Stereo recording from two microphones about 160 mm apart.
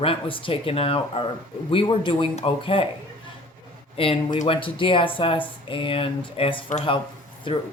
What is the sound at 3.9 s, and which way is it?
Speech, 35° left (ahead or behind).